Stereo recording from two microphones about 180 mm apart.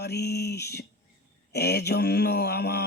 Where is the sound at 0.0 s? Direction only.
65° left (ahead or behind).